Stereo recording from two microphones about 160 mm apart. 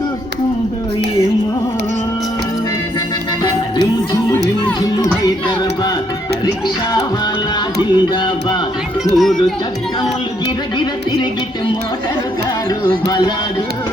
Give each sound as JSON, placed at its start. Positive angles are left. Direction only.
{"t": 4.3, "sound": "music", "side_deg": 20}
{"t": 7.8, "sound": "music", "side_deg": 30}
{"t": 9.1, "sound": "speech", "side_deg": 0}
{"t": 13.1, "sound": "music", "side_deg": 25}